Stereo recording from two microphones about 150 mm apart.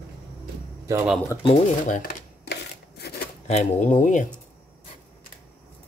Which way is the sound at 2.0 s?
90° left.